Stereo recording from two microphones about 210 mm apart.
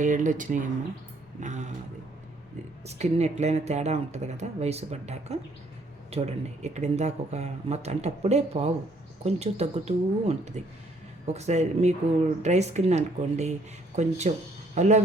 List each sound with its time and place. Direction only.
0.0 s speech: 35° right (ahead or behind)
2.8 s speech: 30° right (ahead or behind)